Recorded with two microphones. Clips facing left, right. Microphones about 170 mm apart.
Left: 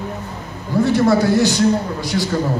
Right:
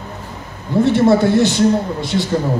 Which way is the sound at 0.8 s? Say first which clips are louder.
Right 2 dB; 25° right (ahead or behind).